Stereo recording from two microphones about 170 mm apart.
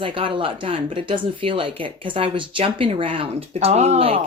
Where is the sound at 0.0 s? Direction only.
30° right (ahead or behind).